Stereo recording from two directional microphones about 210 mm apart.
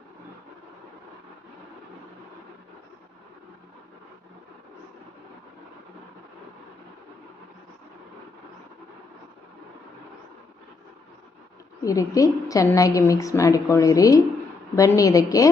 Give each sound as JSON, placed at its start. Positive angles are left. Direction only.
{"t": 11.9, "sound": "a woman's voice", "side_deg": 15}